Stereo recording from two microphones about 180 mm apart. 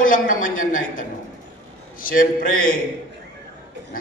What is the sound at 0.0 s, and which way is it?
A man's voice, 50° left (ahead or behind).